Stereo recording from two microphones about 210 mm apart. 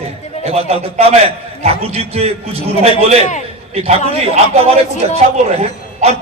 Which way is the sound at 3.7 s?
30° right (ahead or behind).